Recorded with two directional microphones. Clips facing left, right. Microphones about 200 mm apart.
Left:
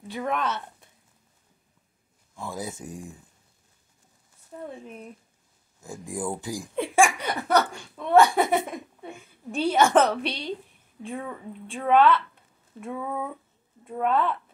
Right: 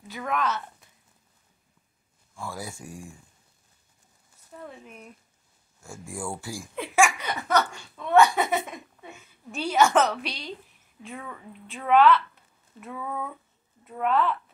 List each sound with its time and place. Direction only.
0.1 s a woman's voice: 30° left (ahead or behind)
2.3 s a woman's voice: 20° left (ahead or behind)
4.6 s a woman's voice: 30° left (ahead or behind)
5.8 s speech: 20° left (ahead or behind)
7.3 s a woman's voice: 30° left (ahead or behind)